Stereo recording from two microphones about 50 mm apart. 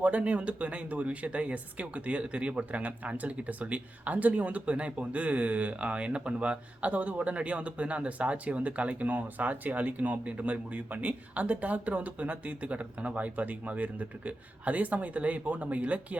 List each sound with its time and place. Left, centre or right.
0.0 s speech: right